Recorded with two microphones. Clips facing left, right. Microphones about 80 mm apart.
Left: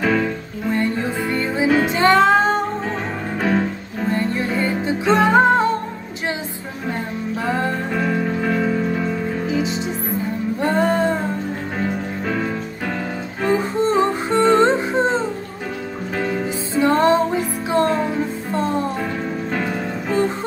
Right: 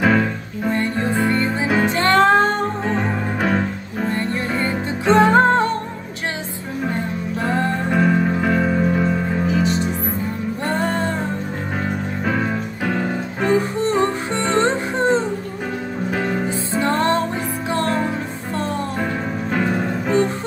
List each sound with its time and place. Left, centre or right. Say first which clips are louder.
0.0 s music: right 2 dB; centre
1.3 s music: left 1 dB; centre
4.1 s music: left 3 dB; centre
7.9 s music: right 3 dB; centre
10.6 s music: left 4 dB; centre
12.3 s music: right 2 dB; centre
13.5 s music: left 1 dB; centre
16.8 s music: left 4 dB; centre